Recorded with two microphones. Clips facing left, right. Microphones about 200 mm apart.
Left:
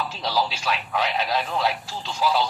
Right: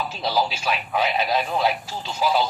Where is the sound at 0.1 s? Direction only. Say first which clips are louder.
Right 2 dB; 10° right (ahead or behind).